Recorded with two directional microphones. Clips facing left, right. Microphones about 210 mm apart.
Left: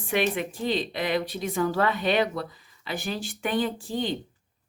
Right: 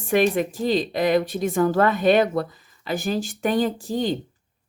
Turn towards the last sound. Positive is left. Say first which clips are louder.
# right 5 dB
turn(degrees=-40)  # may be behind; listen again after turning